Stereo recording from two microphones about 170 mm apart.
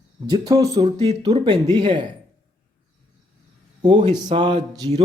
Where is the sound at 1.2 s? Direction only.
30° right (ahead or behind).